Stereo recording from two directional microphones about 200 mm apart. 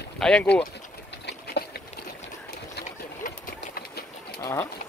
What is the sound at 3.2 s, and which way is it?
Sewing machine, 45° left (ahead or behind).